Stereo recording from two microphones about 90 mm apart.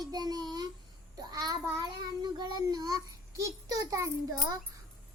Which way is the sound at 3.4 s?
40° right (ahead or behind).